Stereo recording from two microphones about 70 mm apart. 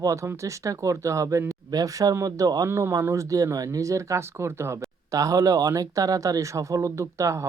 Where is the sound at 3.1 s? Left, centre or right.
Right.